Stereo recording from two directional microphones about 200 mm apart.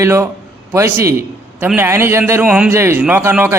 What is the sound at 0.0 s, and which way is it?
Speech, 15° right (ahead or behind).